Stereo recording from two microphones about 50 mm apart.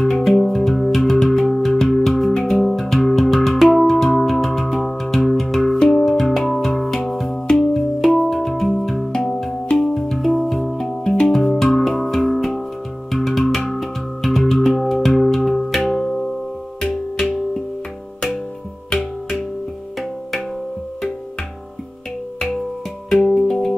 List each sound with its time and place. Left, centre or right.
0.0 s music: centre
5.8 s music: centre
8.0 s music: centre
20.0 s music: centre
23.0 s music: centre